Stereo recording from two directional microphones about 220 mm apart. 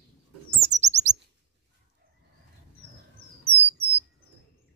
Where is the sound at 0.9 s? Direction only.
35° right (ahead or behind).